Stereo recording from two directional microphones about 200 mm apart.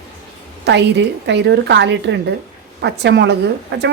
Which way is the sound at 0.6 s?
60° right (ahead or behind).